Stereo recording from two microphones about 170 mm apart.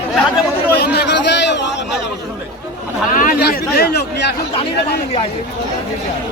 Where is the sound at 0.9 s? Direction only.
85° left.